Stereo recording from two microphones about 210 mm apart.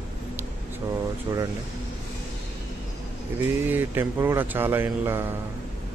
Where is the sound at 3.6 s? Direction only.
10° right (ahead or behind).